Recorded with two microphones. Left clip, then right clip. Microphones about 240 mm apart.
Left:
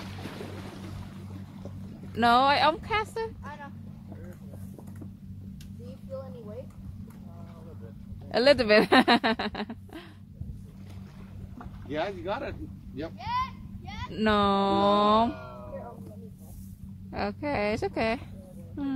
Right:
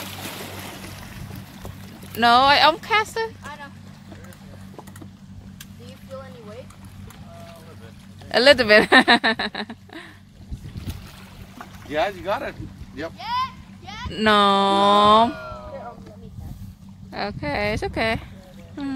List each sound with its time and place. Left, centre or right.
0.0 s boat: right
2.1 s speech: centre
8.3 s speech: centre
11.9 s speech: right
13.2 s a sound: left
14.1 s speech: centre
17.1 s speech: centre